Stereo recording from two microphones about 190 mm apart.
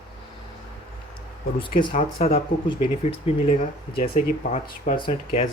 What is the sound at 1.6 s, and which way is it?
Speech, 25° left (ahead or behind).